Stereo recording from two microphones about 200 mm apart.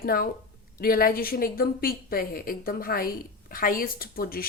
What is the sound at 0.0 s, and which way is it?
A woman's voice, 45° left (ahead or behind).